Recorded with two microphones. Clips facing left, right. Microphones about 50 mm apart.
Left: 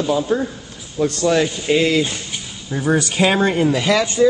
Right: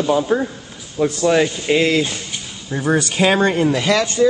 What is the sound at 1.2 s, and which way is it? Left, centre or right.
A man's voice, centre.